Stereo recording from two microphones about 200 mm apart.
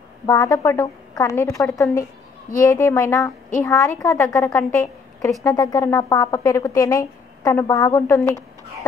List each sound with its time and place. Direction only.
0.3 s speech: 15° left (ahead or behind)